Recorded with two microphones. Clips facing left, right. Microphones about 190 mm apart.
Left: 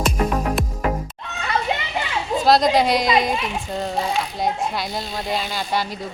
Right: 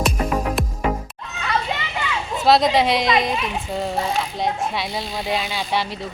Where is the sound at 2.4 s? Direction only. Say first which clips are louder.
Even; centre (ahead or behind).